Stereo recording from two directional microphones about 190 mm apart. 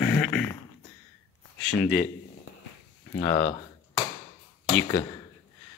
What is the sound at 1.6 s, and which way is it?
Speech, centre (ahead or behind).